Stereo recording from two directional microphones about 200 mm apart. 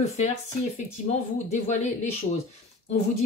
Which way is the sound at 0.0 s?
35° left (ahead or behind).